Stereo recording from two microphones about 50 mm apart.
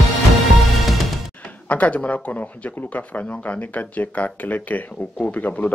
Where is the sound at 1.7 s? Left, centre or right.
Left.